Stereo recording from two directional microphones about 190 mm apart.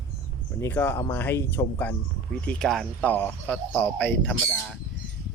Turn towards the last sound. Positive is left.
turn(degrees=5)  # may be behind; listen again after turning